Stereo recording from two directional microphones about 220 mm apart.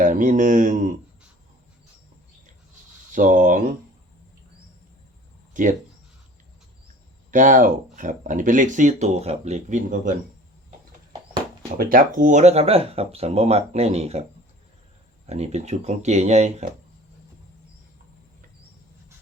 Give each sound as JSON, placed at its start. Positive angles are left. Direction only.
{"t": 0.0, "sound": "speech", "side_deg": -35}
{"t": 3.1, "sound": "speech", "side_deg": -35}
{"t": 5.5, "sound": "speech", "side_deg": -35}
{"t": 7.3, "sound": "speech", "side_deg": -35}
{"t": 11.8, "sound": "speech", "side_deg": -40}
{"t": 15.3, "sound": "speech", "side_deg": -30}